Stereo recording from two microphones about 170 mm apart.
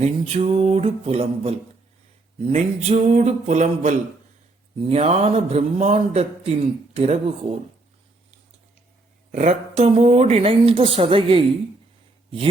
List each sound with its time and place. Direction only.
0.0 s a man's voice: 40° right (ahead or behind)
9.3 s a man's voice: 45° right (ahead or behind)